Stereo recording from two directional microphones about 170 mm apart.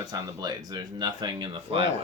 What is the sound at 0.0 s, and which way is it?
Speech, 25° right (ahead or behind).